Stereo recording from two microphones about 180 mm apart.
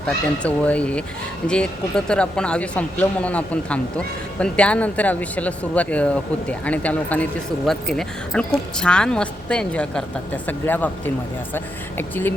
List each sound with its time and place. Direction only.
0.0 s a woman's voice: 5° left (ahead or behind)